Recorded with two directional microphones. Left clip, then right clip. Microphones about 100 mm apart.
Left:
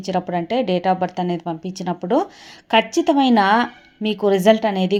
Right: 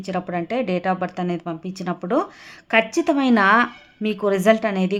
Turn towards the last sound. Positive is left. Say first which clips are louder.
# left 2 dB
turn(degrees=15)  # may be behind; listen again after turning